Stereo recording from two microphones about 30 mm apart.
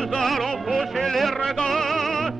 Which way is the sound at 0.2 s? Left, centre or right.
Centre.